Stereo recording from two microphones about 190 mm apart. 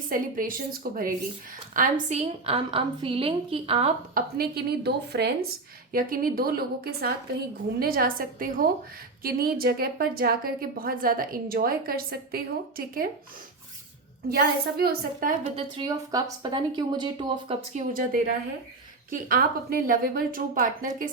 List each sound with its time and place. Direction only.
0.1 s a woman's voice: 45° right (ahead or behind); by 3.9 s 30° right (ahead or behind)
4.1 s a woman's voice: 55° right (ahead or behind)
14.3 s a woman's voice: 55° right (ahead or behind)
15.5 s a woman's voice: 25° right (ahead or behind); by 20.7 s 45° right (ahead or behind)